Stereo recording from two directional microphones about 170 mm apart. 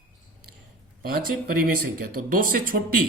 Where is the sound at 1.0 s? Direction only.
60° right (ahead or behind).